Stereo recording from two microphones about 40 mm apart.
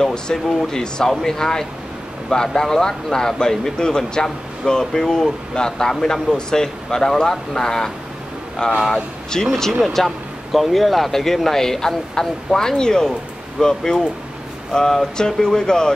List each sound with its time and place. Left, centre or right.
0.6 s speech: centre